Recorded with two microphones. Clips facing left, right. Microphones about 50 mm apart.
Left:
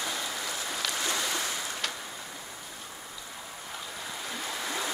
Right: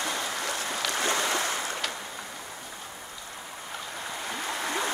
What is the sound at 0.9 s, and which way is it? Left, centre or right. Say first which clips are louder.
Boat: right 6 dB; right.